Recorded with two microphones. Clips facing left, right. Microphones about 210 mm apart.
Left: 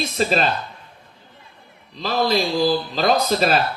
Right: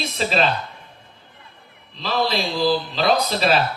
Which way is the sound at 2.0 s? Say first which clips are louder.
Left 3 dB; 45° left (ahead or behind).